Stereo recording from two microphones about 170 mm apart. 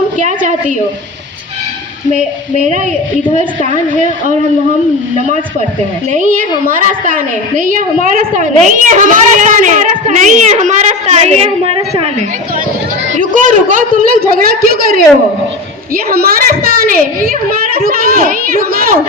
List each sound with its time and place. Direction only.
0.2 s a sound: 45° right (ahead or behind)
2.1 s a woman's voice: 45° right (ahead or behind)
6.1 s a woman's voice: 50° right (ahead or behind); by 12.0 s 35° right (ahead or behind)
13.1 s a woman's voice: 50° right (ahead or behind)
16.0 s a woman's voice: 60° right (ahead or behind)
17.8 s a woman's voice: 55° right (ahead or behind)